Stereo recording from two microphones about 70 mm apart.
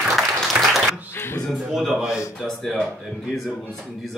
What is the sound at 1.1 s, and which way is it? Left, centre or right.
Speech, left.